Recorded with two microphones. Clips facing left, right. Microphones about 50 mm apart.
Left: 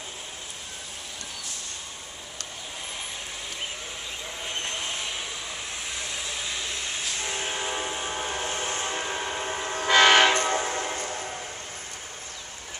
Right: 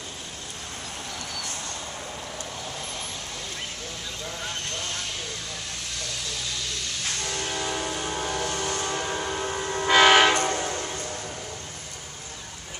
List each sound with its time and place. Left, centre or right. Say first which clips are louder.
4.4 s vehicle: left 2 dB; centre
7.2 s train: right 1 dB; centre
9.8 s train: right 1 dB; centre
10.3 s train: even; left